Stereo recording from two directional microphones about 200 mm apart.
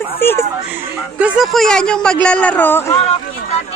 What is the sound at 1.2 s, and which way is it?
A woman's voice, 5° right (ahead or behind).